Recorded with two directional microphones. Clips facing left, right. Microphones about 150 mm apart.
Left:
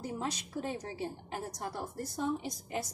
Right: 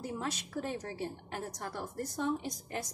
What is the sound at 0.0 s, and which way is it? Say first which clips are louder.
A woman's voice: even; 15° left (ahead or behind).